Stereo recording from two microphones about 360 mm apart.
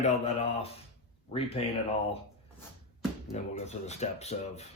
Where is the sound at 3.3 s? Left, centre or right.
Centre.